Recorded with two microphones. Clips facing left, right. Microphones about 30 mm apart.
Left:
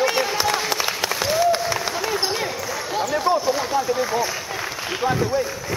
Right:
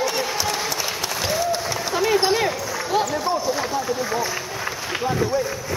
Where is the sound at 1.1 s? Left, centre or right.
Centre.